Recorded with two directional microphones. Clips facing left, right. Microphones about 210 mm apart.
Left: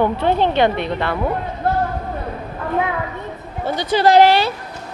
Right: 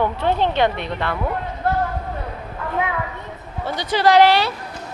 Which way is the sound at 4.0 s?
45° left (ahead or behind).